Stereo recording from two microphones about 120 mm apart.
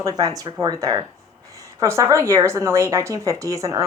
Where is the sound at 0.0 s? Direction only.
30° right (ahead or behind).